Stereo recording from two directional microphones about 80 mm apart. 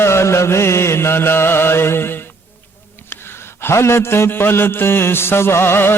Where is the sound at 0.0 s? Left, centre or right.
Left.